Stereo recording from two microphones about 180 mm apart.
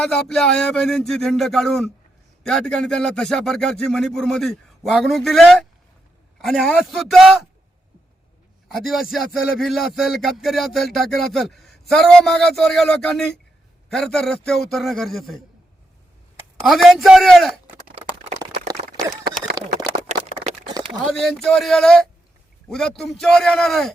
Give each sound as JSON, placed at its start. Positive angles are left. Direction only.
{"t": 0.0, "sound": "speech", "side_deg": 5}
{"t": 8.8, "sound": "speech", "side_deg": 0}
{"t": 16.6, "sound": "speech", "side_deg": 0}
{"t": 19.6, "sound": "speech", "side_deg": -20}
{"t": 20.7, "sound": "a sound", "side_deg": -25}
{"t": 21.0, "sound": "speech", "side_deg": 0}